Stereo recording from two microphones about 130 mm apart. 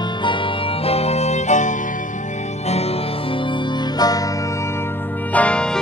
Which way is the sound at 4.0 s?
30° left (ahead or behind).